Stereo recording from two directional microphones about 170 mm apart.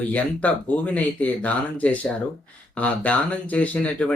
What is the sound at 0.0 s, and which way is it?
Speech, 10° left (ahead or behind).